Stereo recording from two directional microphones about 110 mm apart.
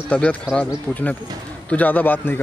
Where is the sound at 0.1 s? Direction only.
10° left (ahead or behind).